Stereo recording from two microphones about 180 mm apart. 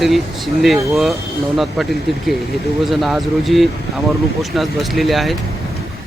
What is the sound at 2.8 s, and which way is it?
Speech, centre (ahead or behind).